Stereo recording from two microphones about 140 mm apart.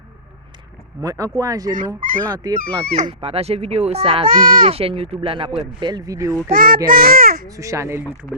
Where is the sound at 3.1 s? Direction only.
45° right (ahead or behind).